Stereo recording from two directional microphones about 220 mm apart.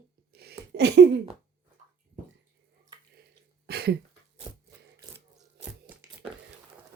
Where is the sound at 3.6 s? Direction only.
45° right (ahead or behind).